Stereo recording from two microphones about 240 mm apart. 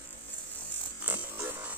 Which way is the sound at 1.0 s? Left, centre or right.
Centre.